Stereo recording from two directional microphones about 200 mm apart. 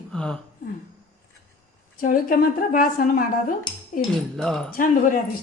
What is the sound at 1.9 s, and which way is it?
Speech, 45° left (ahead or behind).